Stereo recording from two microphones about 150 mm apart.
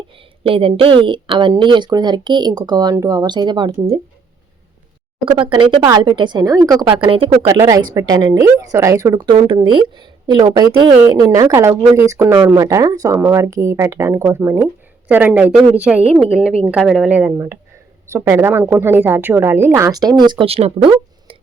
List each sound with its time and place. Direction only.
0.4 s a woman's voice: 35° right (ahead or behind)
5.2 s a woman's voice: 35° right (ahead or behind)
7.0 s a woman's voice: 35° right (ahead or behind)
7.4 s a woman's voice: 25° right (ahead or behind)
9.2 s a woman's voice: 35° right (ahead or behind)